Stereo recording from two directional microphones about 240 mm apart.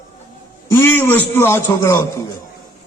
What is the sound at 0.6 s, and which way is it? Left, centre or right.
A man's voice, centre.